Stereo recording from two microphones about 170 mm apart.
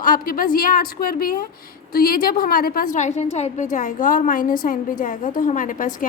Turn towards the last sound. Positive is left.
turn(degrees=50)  # may be behind; listen again after turning